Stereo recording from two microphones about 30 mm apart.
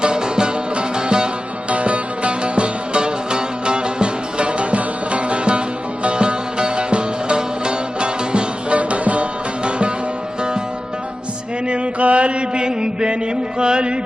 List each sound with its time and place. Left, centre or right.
0.0 s music: right
1.7 s music: right
9.6 s music: right
11.7 s mantra: right
13.6 s music: right